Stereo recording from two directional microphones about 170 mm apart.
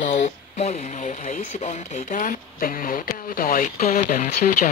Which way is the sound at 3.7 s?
45° left (ahead or behind).